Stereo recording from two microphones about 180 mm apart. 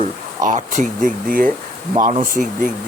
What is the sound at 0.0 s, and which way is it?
Speech, 45° right (ahead or behind).